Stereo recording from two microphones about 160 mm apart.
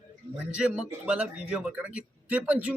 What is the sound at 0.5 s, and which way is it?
A man's voice, 5° right (ahead or behind).